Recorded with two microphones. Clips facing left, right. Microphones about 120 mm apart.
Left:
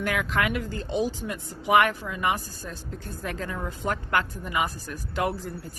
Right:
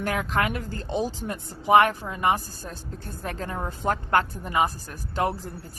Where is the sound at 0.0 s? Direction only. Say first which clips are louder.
Right 1 dB; 35° right (ahead or behind).